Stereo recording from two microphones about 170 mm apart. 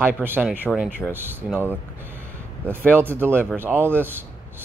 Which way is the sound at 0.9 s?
10° right (ahead or behind).